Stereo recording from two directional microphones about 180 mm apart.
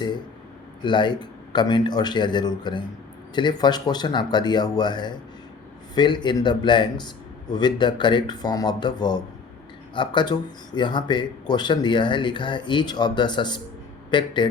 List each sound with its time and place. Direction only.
0.8 s a man's voice: 25° left (ahead or behind)